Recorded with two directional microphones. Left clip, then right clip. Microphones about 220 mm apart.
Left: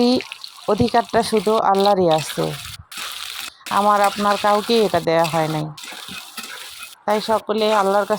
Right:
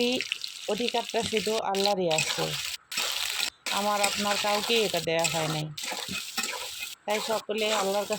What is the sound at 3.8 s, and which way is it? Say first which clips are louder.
Speech: left 12 dB; 30° left (ahead or behind).